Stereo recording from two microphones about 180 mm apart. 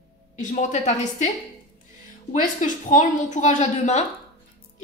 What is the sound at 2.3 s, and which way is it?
A woman's voice, 45° left (ahead or behind).